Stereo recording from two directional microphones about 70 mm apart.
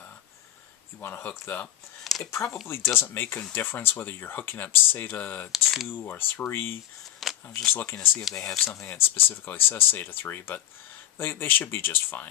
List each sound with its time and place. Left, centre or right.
1.0 s speech: left
2.1 s a sound: centre
2.9 s speech: left
5.5 s speech: centre
5.9 s speech: left
7.2 s a sound: centre
7.7 s speech: left
8.4 s speech: centre
8.8 s speech: left